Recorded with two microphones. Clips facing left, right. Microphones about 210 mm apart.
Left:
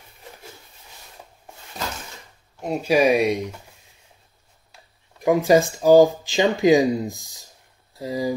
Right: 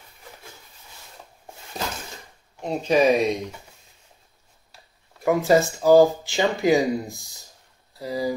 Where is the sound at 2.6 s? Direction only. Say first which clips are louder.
Left 1 dB; 10° left (ahead or behind).